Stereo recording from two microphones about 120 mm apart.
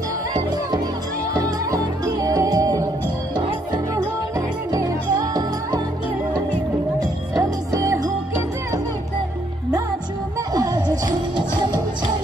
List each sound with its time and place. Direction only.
1.3 s music: 30° right (ahead or behind)
7.0 s music: 30° right (ahead or behind)
10.5 s music: 30° right (ahead or behind)